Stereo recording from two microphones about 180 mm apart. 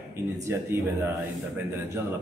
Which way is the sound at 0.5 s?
15° right (ahead or behind).